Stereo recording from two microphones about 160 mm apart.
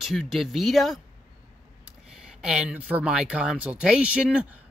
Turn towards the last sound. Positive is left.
turn(degrees=-5)  # may be behind; listen again after turning